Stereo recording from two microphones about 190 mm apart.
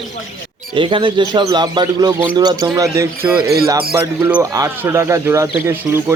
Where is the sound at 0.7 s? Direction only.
25° right (ahead or behind).